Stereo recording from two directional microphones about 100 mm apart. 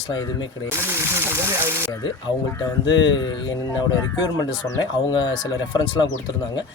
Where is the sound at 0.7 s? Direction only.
25° right (ahead or behind).